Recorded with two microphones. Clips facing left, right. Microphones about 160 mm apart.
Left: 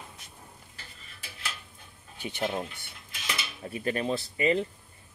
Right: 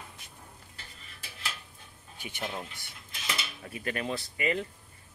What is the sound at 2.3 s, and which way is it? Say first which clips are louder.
Speech: left 6 dB; 20° left (ahead or behind).